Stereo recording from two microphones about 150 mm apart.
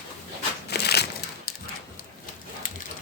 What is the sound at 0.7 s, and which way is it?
Crushing, 90° left.